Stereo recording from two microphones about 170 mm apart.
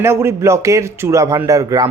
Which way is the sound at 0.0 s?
15° right (ahead or behind).